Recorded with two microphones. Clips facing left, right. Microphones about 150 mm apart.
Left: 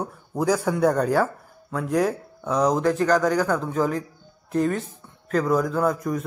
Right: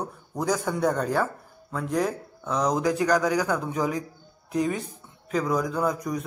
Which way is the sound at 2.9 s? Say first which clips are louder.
Left 2 dB; 10° right (ahead or behind).